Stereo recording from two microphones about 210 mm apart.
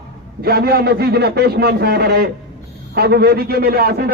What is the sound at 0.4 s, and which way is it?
A man's voice, 50° right (ahead or behind).